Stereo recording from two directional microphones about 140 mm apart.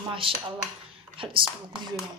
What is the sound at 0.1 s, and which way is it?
A woman's voice, 40° right (ahead or behind).